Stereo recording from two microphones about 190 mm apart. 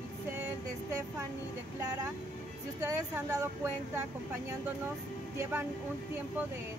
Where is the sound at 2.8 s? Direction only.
15° right (ahead or behind).